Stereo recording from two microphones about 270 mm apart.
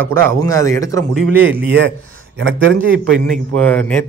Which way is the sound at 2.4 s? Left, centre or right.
Right.